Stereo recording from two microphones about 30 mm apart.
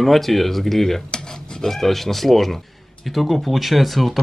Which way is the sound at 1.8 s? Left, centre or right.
Centre.